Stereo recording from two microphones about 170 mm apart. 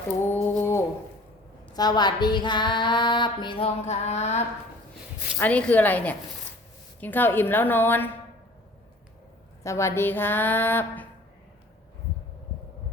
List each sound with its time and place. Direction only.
0.4 s a sound: 15° left (ahead or behind)
1.7 s female singing: 25° left (ahead or behind); by 4.4 s 40° left (ahead or behind)
5.4 s a woman's voice: 10° left (ahead or behind)
9.6 s a woman's voice: 15° left (ahead or behind)